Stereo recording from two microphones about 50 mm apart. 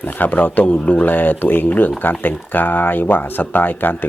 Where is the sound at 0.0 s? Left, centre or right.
Left.